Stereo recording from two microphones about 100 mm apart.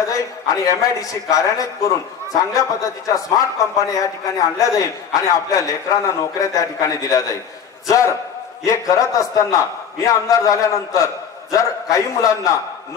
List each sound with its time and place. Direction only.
0.0 s a man's voice: 35° left (ahead or behind)